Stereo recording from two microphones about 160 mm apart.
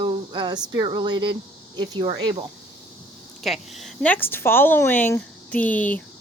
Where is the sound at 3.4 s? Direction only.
Centre (ahead or behind).